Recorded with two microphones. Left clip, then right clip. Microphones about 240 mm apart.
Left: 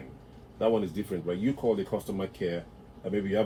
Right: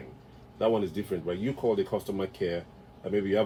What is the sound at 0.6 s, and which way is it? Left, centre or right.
Speech, right.